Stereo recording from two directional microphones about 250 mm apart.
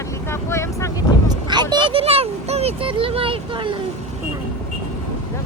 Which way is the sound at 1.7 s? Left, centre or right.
Right.